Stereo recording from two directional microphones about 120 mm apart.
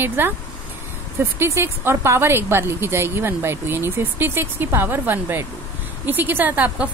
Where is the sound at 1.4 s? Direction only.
20° right (ahead or behind).